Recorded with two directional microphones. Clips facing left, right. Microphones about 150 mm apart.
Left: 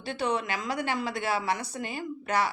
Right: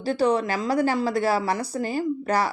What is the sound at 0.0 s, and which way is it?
A woman's voice, 35° right (ahead or behind).